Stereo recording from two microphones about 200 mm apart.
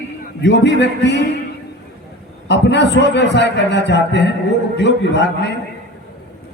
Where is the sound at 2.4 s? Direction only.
60° left (ahead or behind).